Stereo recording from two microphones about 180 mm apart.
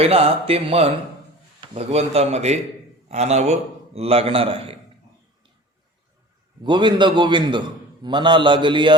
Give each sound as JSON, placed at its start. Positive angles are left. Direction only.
{"t": 0.0, "sound": "a man's voice", "side_deg": -35}
{"t": 6.6, "sound": "a man's voice", "side_deg": -25}